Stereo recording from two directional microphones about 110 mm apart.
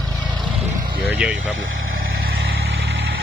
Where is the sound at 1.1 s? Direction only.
10° right (ahead or behind).